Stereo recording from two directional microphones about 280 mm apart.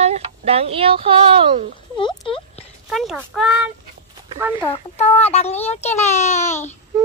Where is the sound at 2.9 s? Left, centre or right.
Centre.